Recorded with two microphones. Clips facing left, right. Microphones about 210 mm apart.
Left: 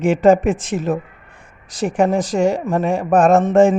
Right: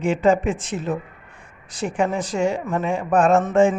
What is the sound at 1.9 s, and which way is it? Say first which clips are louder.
Speech: left 6 dB; 40° left (ahead or behind).